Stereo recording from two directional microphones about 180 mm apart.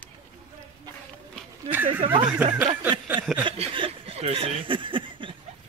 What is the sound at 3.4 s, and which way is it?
Chuckle, 30° right (ahead or behind).